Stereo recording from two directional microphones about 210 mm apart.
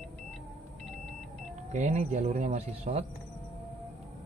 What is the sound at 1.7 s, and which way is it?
Speech, 30° right (ahead or behind).